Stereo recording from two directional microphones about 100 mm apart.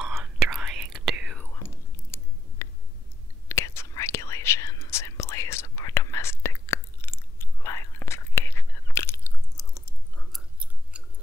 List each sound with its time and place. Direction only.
0.2 s whispering: 5° right (ahead or behind)
1.4 s whispering: 25° left (ahead or behind)
10.6 s chewing: 10° right (ahead or behind)